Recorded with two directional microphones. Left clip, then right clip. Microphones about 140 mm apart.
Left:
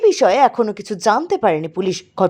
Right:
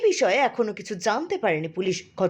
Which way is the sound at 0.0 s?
50° left (ahead or behind).